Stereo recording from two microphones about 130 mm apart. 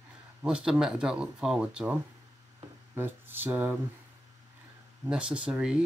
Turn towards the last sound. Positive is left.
turn(degrees=-5)  # may be behind; listen again after turning